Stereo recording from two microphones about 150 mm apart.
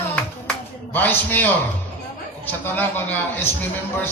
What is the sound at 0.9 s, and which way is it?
A man's voice, 10° left (ahead or behind).